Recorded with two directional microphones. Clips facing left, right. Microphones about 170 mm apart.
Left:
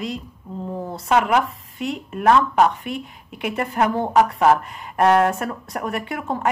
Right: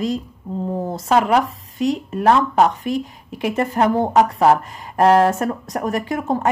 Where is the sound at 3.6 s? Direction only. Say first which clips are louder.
Right 3 dB; 30° right (ahead or behind).